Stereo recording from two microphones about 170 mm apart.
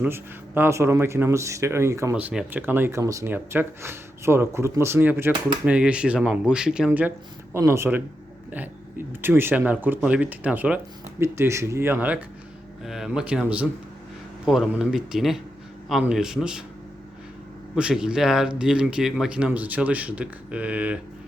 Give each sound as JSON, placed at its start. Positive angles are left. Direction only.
{"t": 0.0, "sound": "speech", "side_deg": -10}
{"t": 17.7, "sound": "speech", "side_deg": -5}